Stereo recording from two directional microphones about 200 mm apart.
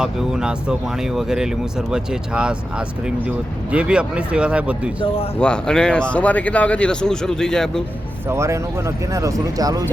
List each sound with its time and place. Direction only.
0.0 s speech: 5° right (ahead or behind)
3.7 s speech: 5° right (ahead or behind)
8.3 s speech: 15° right (ahead or behind)